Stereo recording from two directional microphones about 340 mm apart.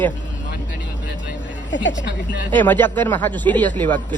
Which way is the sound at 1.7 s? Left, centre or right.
Left.